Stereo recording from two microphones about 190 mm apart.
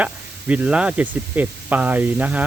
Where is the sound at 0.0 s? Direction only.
10° right (ahead or behind).